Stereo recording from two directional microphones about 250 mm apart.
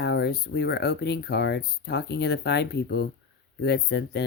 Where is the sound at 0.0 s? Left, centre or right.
Left.